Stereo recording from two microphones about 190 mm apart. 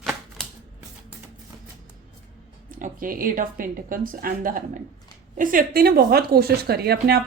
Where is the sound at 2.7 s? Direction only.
45° right (ahead or behind).